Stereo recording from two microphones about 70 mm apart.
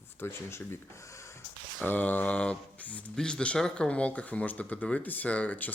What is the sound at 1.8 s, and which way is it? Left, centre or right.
Speech, left.